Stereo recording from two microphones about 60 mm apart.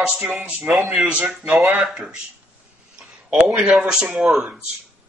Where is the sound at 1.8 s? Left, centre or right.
Centre.